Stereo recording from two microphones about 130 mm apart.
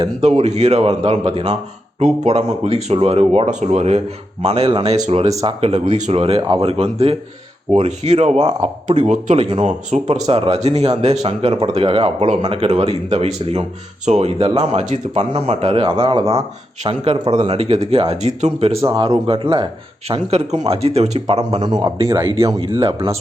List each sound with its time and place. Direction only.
0.2 s speech: 55° right (ahead or behind)
9.4 s speech: 55° right (ahead or behind)
10.2 s speech: 50° right (ahead or behind)
20.3 s speech: 55° right (ahead or behind)
21.6 s speech: 35° right (ahead or behind)